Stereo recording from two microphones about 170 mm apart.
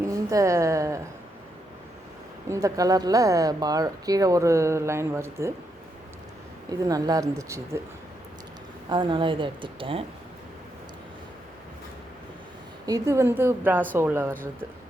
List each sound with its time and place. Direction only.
0.0 s a woman's voice: 20° right (ahead or behind)
2.5 s speech: 20° right (ahead or behind)
6.7 s speech: 20° right (ahead or behind)
8.9 s speech: 30° right (ahead or behind)
12.8 s speech: 20° right (ahead or behind)